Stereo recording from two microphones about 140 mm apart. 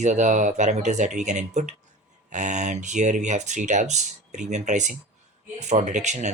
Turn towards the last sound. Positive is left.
turn(degrees=-60)  # may be behind; listen again after turning